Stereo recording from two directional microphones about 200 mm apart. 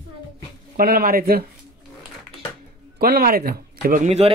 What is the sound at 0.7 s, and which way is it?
Speech, 50° right (ahead or behind).